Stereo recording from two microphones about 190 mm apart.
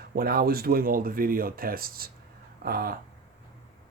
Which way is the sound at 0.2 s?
50° right (ahead or behind).